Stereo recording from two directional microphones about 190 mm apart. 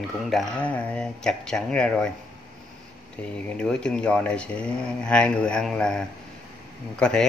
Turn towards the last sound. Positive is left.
turn(degrees=5)  # may be behind; listen again after turning